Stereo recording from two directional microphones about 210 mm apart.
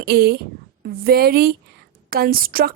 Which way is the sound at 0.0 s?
45° right (ahead or behind).